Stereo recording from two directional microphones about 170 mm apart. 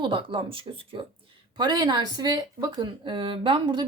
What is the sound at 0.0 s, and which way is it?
Speech, 30° right (ahead or behind).